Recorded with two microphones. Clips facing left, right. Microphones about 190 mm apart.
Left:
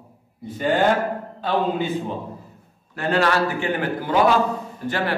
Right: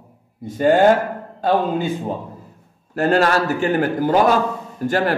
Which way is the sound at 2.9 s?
40° right (ahead or behind).